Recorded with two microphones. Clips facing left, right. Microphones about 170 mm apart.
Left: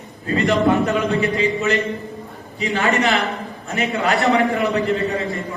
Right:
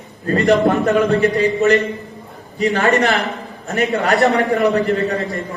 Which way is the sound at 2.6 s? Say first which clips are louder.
Right 4 dB; 40° right (ahead or behind).